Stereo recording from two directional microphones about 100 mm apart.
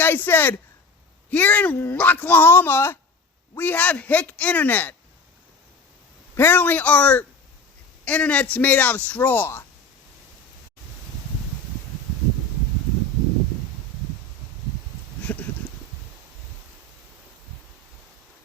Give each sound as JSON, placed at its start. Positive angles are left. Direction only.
{"t": 0.0, "sound": "a man's voice", "side_deg": 20}
{"t": 6.3, "sound": "a man's voice", "side_deg": 20}
{"t": 15.2, "sound": "a sound", "side_deg": 15}